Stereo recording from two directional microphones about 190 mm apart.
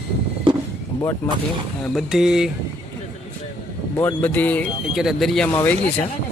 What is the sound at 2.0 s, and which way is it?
Speech, 5° right (ahead or behind).